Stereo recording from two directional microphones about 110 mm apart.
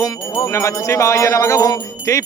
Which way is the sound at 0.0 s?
35° left (ahead or behind).